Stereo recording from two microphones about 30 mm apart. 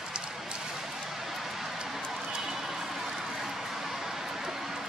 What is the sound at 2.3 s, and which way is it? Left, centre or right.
Vehicle, centre.